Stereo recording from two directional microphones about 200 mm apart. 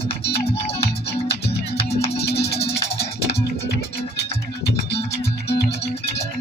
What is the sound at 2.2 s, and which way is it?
Music, 55° left (ahead or behind).